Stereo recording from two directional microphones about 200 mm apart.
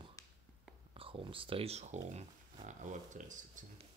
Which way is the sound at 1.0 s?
25° right (ahead or behind).